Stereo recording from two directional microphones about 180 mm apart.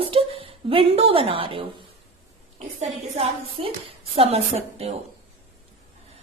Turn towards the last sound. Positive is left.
turn(degrees=-35)  # may be behind; listen again after turning